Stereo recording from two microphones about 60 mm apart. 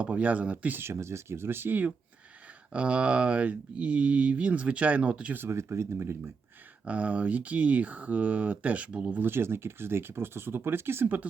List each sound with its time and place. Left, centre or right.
0.0 s speech: right
0.8 s speech: right
2.7 s speech: centre
5.4 s speech: right
6.8 s speech: right
9.2 s speech: right